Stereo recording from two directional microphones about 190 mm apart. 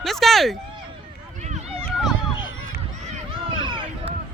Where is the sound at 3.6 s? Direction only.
25° right (ahead or behind).